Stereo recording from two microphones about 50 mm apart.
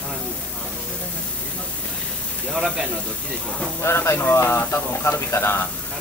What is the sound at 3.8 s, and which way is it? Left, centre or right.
Speech, left.